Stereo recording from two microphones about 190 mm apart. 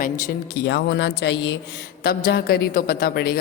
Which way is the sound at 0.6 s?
65° left (ahead or behind).